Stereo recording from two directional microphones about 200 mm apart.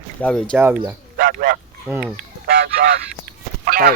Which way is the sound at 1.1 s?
45° right (ahead or behind).